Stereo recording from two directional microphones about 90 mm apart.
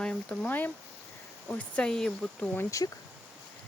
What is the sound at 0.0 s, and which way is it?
Speech, 10° left (ahead or behind).